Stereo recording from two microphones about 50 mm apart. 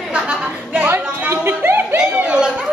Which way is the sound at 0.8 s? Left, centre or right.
Right.